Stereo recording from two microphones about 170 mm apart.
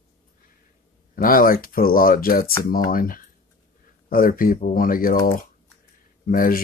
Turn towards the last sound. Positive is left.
turn(degrees=55)  # may be behind; listen again after turning